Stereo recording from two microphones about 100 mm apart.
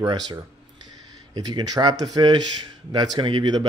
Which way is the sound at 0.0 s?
45° right (ahead or behind).